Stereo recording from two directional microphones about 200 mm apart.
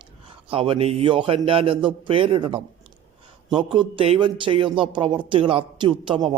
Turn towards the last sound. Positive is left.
turn(degrees=-25)  # may be behind; listen again after turning